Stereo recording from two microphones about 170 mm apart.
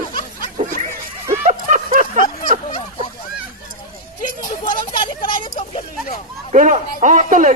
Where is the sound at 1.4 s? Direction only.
50° right (ahead or behind).